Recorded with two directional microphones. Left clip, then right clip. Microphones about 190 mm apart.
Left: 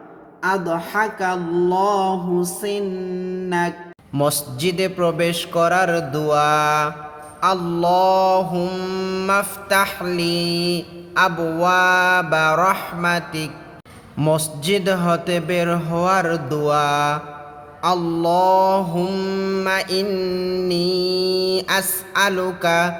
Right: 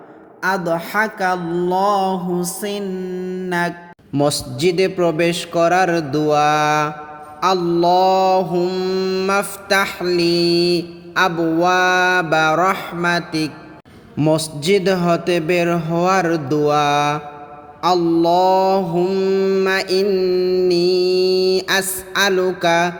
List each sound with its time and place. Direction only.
0.4 s speech: 45° right (ahead or behind)
4.1 s mantra: 20° right (ahead or behind)